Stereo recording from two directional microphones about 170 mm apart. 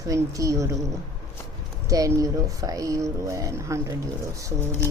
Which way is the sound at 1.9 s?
20° right (ahead or behind).